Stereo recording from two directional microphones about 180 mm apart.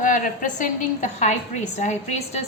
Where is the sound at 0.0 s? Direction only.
45° left (ahead or behind).